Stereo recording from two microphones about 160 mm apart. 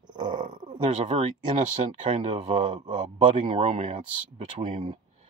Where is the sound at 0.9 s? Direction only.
45° right (ahead or behind).